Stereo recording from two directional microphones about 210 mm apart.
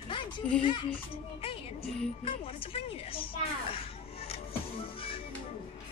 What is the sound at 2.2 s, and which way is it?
A woman's voice, 25° left (ahead or behind).